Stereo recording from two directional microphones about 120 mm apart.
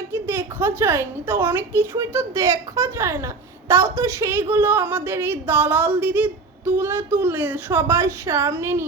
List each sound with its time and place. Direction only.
0.1 s a woman's voice: 20° right (ahead or behind)